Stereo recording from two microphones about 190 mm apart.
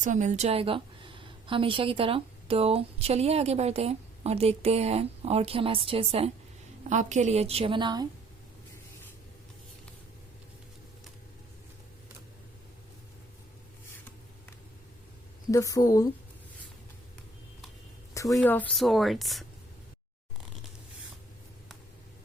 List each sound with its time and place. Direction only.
0.0 s a woman's voice: 40° right (ahead or behind); by 8.0 s 25° right (ahead or behind)
15.5 s a woman's voice: 15° left (ahead or behind)
18.3 s speech: 5° left (ahead or behind)